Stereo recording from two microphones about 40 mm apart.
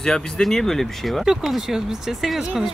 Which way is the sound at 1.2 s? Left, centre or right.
Centre.